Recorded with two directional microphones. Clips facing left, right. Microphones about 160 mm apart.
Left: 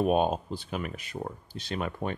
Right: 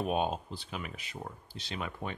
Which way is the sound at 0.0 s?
50° left (ahead or behind).